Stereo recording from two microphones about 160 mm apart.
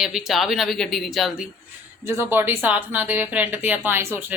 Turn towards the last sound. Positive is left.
turn(degrees=-15)  # may be behind; listen again after turning